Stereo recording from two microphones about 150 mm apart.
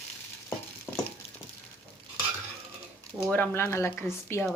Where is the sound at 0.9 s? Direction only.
Centre (ahead or behind).